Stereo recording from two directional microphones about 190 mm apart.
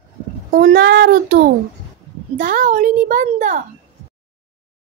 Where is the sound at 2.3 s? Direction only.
45° right (ahead or behind).